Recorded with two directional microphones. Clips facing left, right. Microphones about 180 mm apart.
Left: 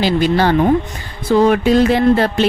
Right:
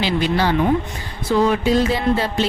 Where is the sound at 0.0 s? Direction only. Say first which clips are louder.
Left 5 dB; 45° left (ahead or behind).